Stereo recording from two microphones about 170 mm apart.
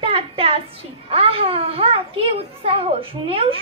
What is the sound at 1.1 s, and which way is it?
A child's voice, 35° right (ahead or behind).